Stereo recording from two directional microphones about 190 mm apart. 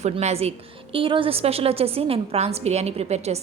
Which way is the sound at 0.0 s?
35° right (ahead or behind).